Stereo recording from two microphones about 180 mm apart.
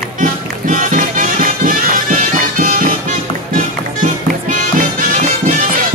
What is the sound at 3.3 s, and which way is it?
Music, 30° left (ahead or behind).